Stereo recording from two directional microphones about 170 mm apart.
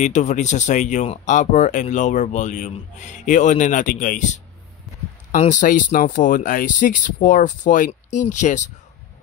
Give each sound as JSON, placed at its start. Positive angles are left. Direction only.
{"t": 0.0, "sound": "speech", "side_deg": 45}